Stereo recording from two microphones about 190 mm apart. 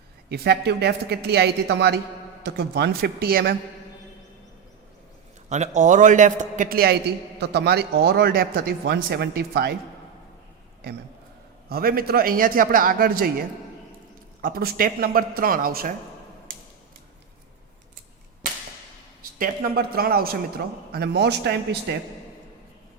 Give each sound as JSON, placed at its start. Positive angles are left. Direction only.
{"t": 0.3, "sound": "a man's voice", "side_deg": -60}
{"t": 5.5, "sound": "a man's voice", "side_deg": -40}
{"t": 11.7, "sound": "a man's voice", "side_deg": -50}
{"t": 14.4, "sound": "a man's voice", "side_deg": -50}
{"t": 19.4, "sound": "a man's voice", "side_deg": -50}